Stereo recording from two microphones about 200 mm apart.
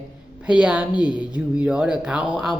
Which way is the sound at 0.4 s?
5° right (ahead or behind).